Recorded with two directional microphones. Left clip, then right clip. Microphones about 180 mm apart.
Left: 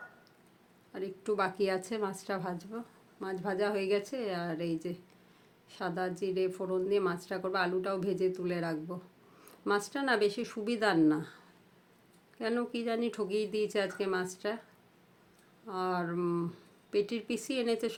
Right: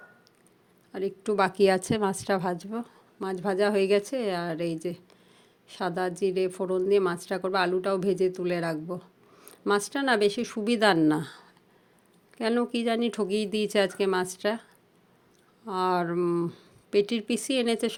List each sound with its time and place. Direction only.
0.9 s a woman's voice: 40° right (ahead or behind)
15.6 s a woman's voice: 50° right (ahead or behind)